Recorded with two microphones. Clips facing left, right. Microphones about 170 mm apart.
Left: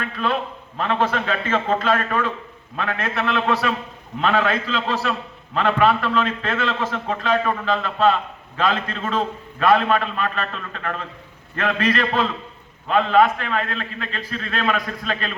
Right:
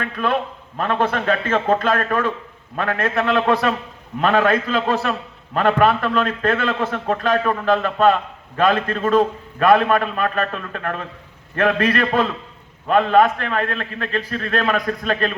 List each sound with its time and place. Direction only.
0.0 s a man's voice: 50° right (ahead or behind)